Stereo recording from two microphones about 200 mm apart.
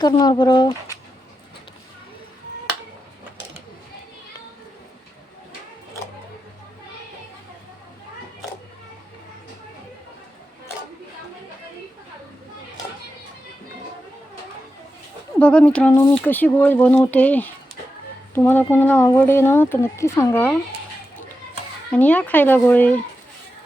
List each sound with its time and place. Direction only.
0.0 s speech: 20° left (ahead or behind)
15.4 s speech: 5° left (ahead or behind)
21.9 s speech: 10° left (ahead or behind)